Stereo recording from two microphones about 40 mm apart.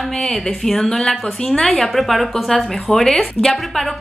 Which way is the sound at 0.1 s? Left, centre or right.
Centre.